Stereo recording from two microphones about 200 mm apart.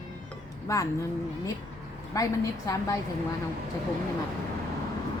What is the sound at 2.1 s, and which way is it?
Speech, 15° left (ahead or behind).